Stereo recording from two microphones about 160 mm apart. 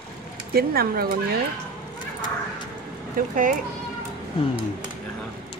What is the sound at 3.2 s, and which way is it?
Speech, 65° right (ahead or behind).